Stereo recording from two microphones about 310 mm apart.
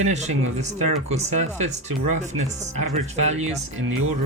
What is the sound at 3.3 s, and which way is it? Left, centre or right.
Speech, right.